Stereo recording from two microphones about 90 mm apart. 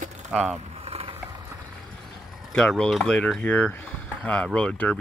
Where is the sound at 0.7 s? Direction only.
90° right.